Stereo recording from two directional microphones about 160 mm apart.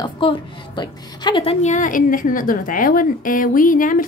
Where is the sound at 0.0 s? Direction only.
30° left (ahead or behind).